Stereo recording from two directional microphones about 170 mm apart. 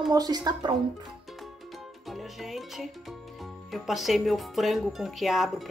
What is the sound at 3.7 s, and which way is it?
Speech, centre (ahead or behind).